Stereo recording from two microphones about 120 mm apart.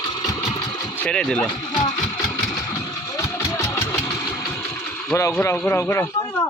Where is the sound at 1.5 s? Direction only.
40° left (ahead or behind).